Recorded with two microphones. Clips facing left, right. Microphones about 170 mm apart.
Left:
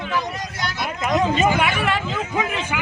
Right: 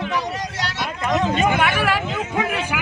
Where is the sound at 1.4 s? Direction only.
Centre (ahead or behind).